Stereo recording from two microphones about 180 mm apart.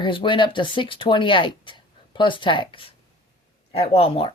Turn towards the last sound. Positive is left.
turn(degrees=30)  # may be behind; listen again after turning